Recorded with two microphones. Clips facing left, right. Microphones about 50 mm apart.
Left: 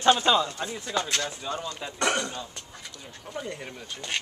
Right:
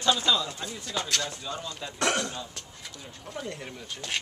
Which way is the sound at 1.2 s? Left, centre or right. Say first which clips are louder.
Left 3 dB; centre.